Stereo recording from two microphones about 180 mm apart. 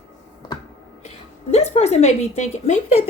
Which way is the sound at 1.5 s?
35° left (ahead or behind).